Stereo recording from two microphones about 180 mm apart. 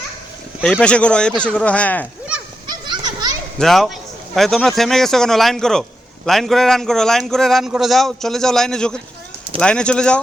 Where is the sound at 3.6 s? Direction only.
Centre (ahead or behind).